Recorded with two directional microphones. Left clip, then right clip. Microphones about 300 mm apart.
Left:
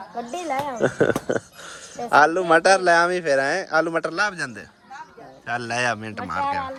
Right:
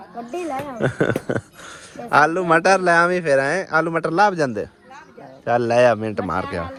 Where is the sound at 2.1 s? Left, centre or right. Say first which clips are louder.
Even; centre.